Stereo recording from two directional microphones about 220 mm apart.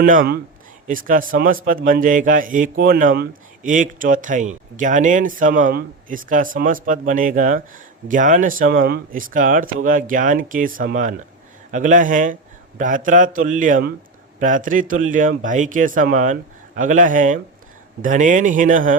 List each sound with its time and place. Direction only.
0.0 s speech: 40° right (ahead or behind)